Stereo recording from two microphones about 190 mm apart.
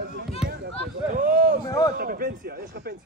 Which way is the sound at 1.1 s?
45° right (ahead or behind).